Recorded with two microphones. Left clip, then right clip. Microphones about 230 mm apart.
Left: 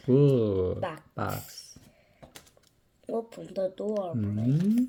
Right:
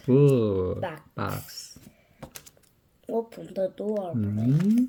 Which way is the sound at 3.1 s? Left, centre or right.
Centre.